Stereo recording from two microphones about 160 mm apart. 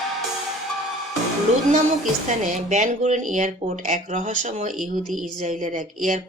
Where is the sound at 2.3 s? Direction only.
45° right (ahead or behind).